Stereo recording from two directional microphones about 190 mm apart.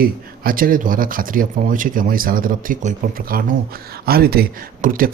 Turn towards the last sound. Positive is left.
turn(degrees=-45)  # may be behind; listen again after turning